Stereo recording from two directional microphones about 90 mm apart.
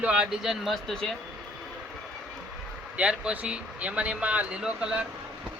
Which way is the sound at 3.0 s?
15° right (ahead or behind).